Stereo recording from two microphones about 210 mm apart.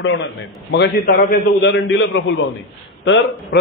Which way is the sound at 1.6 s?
55° left (ahead or behind).